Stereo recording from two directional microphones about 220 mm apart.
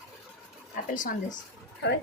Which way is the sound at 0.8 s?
40° left (ahead or behind).